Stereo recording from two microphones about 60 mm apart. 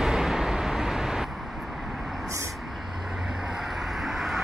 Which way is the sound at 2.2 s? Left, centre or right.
Right.